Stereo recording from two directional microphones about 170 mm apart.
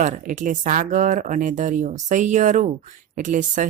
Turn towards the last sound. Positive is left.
turn(degrees=-50)  # may be behind; listen again after turning